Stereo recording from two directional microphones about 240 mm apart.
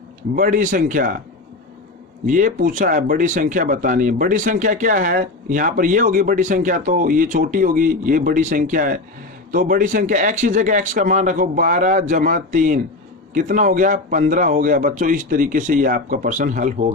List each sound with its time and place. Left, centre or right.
0.3 s speech: right
2.2 s speech: right